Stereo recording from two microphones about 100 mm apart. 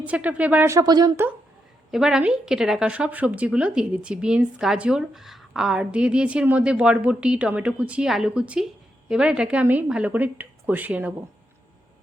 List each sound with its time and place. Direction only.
0.0 s a woman's voice: 15° right (ahead or behind)
0.7 s speech: 35° right (ahead or behind)
1.9 s a woman's voice: 5° right (ahead or behind)